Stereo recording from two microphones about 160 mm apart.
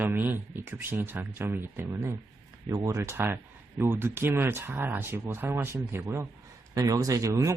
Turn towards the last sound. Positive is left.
turn(degrees=-20)  # may be behind; listen again after turning